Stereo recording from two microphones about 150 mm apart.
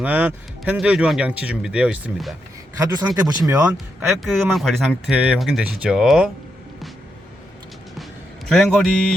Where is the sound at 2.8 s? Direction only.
25° right (ahead or behind).